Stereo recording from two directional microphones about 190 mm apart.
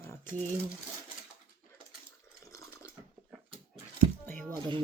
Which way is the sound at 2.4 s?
15° left (ahead or behind).